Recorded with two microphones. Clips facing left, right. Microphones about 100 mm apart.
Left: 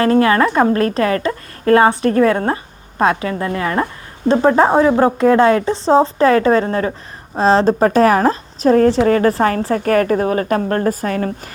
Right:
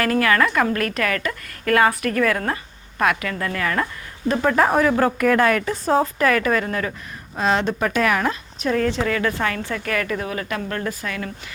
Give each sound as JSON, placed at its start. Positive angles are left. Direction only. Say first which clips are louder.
{"t": 0.0, "sound": "a woman's voice", "louder": "left 6 dB", "side_deg": 30}